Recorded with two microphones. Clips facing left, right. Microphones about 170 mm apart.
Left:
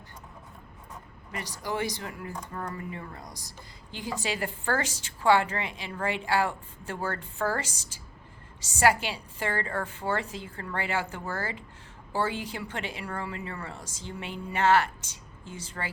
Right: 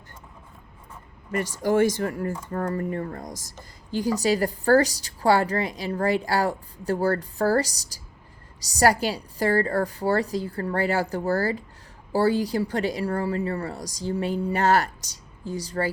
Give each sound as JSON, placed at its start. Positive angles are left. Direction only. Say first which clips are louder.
{"t": 1.3, "sound": "a woman's voice", "louder": "right 11 dB", "side_deg": -50}